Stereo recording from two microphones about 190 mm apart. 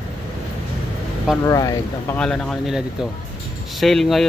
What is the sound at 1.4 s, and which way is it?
Speech, 20° left (ahead or behind).